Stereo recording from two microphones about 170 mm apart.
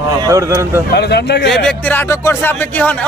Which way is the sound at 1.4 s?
Centre (ahead or behind).